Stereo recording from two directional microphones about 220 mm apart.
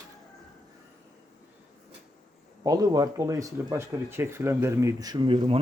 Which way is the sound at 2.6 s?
15° right (ahead or behind).